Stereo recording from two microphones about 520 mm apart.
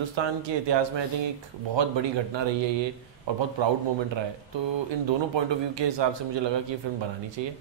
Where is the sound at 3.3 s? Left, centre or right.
Right.